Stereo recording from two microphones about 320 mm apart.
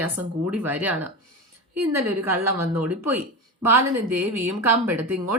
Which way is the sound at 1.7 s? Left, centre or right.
Right.